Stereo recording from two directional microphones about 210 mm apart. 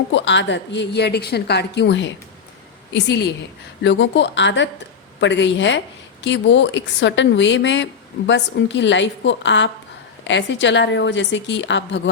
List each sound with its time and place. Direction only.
0.1 s a woman's voice: 60° left (ahead or behind)